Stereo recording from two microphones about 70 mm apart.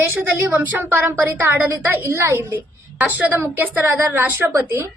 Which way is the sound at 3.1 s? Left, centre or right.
Right.